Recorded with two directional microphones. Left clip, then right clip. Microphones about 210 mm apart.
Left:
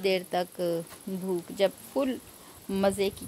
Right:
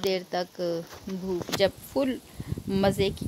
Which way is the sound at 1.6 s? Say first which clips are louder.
Right 1 dB; 15° right (ahead or behind).